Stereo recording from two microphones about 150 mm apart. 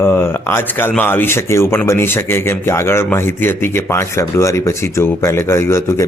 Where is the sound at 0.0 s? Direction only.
15° left (ahead or behind).